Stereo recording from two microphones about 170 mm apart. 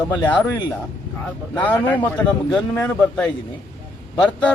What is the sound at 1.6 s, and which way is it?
A man's voice, 10° left (ahead or behind).